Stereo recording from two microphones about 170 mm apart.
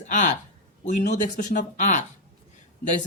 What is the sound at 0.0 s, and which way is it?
A man's voice, 45° left (ahead or behind).